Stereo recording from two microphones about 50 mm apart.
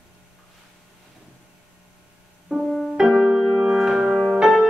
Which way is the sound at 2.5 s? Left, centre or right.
Right.